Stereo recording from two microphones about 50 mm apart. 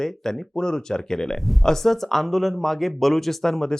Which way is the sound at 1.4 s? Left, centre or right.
Centre.